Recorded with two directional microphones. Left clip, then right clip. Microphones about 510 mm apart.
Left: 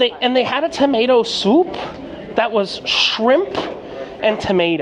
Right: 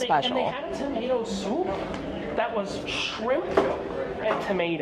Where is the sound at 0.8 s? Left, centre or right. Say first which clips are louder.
Left 19 dB; left.